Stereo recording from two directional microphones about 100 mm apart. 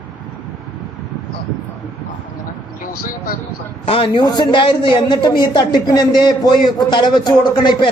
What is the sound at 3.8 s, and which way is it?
Speech, 70° left (ahead or behind).